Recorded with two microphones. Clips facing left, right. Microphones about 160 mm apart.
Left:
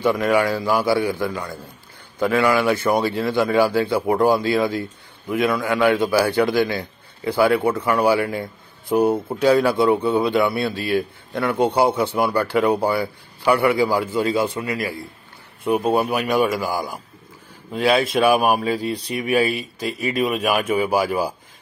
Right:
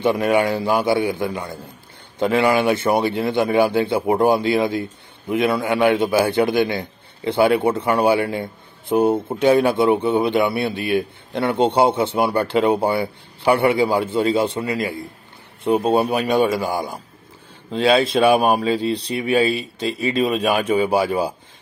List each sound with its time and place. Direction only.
0.0 s a man's voice: 20° right (ahead or behind)